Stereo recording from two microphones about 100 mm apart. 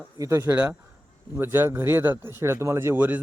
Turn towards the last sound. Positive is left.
turn(degrees=-20)  # may be behind; listen again after turning